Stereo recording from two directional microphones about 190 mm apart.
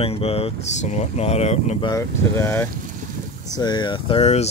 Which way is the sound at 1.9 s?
15° left (ahead or behind).